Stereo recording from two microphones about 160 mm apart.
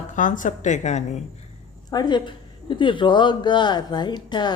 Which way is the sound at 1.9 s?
25° left (ahead or behind).